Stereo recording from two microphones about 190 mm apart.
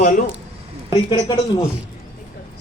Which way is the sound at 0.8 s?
25° left (ahead or behind).